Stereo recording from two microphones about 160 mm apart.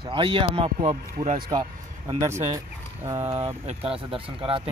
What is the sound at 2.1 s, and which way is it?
Speech, 15° right (ahead or behind).